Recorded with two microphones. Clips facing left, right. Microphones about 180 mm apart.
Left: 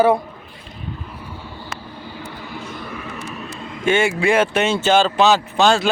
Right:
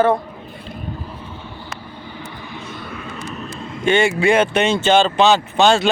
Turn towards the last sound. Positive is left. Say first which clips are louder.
# right 1 dB
turn(degrees=0)  # may be behind; listen again after turning